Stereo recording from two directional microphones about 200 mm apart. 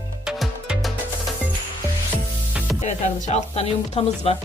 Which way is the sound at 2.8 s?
35° left (ahead or behind).